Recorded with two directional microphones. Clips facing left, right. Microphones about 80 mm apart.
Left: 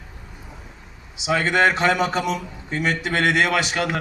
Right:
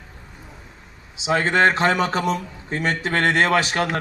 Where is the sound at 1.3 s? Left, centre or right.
Right.